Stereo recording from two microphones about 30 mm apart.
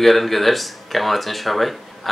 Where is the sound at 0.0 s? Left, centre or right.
Centre.